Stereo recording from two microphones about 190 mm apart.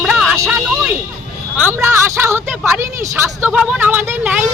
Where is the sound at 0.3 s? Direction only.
15° right (ahead or behind).